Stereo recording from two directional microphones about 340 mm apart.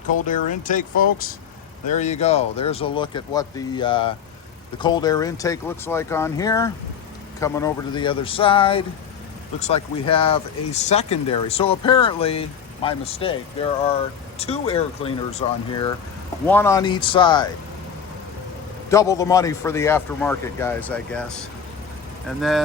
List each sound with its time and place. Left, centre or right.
0.3 s speech: left
16.5 s speech: centre
18.9 s speech: centre
22.4 s speech: centre